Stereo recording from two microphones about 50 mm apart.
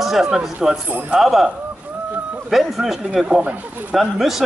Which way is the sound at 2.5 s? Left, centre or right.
Centre.